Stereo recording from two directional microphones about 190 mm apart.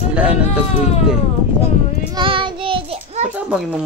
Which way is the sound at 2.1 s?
25° right (ahead or behind).